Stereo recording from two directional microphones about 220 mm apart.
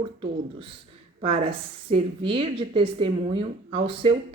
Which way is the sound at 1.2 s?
25° right (ahead or behind).